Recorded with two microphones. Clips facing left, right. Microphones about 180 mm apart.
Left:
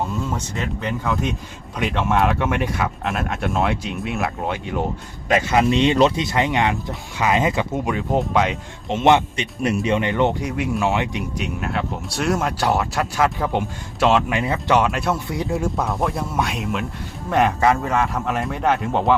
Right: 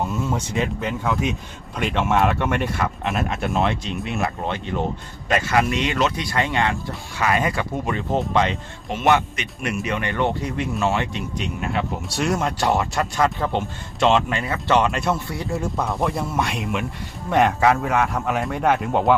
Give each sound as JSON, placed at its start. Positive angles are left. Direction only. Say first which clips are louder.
{"t": 0.3, "sound": "speech", "louder": "right 3 dB", "side_deg": -15}
{"t": 1.0, "sound": "speech", "louder": "right 1 dB", "side_deg": 0}
{"t": 5.3, "sound": "speech", "louder": "left 3 dB", "side_deg": 20}
{"t": 7.9, "sound": "speech", "louder": "left 2 dB", "side_deg": 5}
{"t": 8.9, "sound": "speech", "louder": "left 3 dB", "side_deg": 25}